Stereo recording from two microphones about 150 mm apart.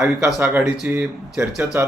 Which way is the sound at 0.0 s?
5° right (ahead or behind).